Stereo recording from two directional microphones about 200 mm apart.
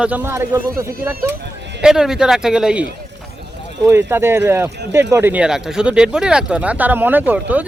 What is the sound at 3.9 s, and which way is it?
A man's voice, 10° right (ahead or behind).